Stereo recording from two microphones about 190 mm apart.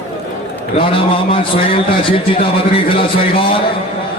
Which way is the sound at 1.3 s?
30° left (ahead or behind).